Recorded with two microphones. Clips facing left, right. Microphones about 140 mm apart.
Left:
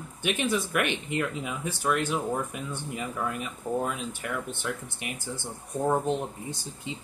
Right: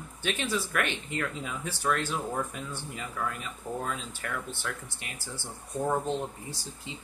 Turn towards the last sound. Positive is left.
turn(degrees=15)  # may be behind; listen again after turning